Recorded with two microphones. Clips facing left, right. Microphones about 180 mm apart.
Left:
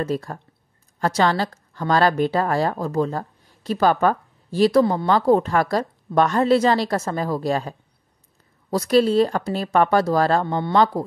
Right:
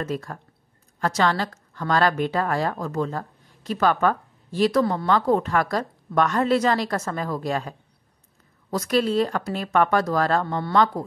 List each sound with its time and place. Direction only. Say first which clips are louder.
0.0 s a woman's voice: left 4 dB; 30° left (ahead or behind)